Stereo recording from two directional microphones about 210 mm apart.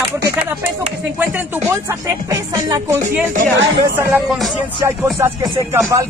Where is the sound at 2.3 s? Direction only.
15° right (ahead or behind).